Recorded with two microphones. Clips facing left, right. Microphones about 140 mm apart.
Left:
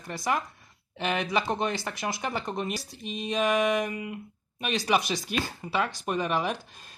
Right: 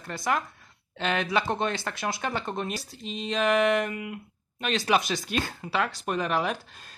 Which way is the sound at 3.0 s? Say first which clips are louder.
Even; 55° left (ahead or behind).